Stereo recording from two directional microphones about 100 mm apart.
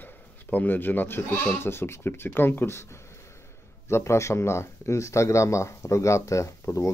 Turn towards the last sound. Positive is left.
turn(degrees=30)  # may be behind; listen again after turning